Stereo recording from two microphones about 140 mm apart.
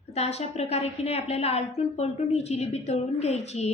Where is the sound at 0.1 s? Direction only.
50° left (ahead or behind).